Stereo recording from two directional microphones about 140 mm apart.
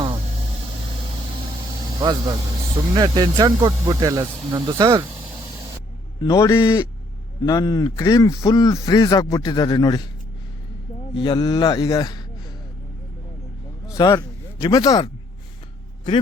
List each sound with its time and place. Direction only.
2.0 s speech: 30° right (ahead or behind)
6.2 s a man's voice: 20° left (ahead or behind)
11.2 s speech: 30° left (ahead or behind)
13.9 s speech: 25° left (ahead or behind)